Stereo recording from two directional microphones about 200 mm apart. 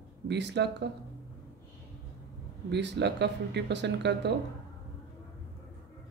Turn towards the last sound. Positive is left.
turn(degrees=-60)  # may be behind; listen again after turning